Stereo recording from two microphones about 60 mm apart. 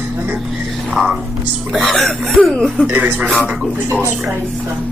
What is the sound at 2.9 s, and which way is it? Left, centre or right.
Speech, right.